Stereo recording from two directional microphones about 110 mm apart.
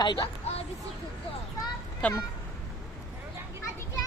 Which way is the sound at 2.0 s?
10° left (ahead or behind).